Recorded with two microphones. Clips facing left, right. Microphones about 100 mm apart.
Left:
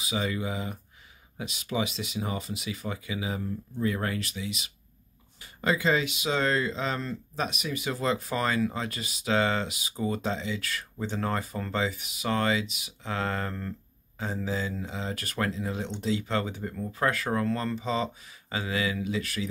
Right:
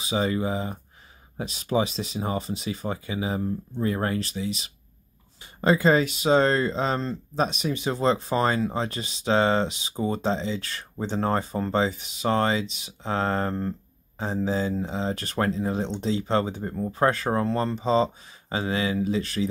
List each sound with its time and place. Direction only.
0.0 s speech: 35° right (ahead or behind)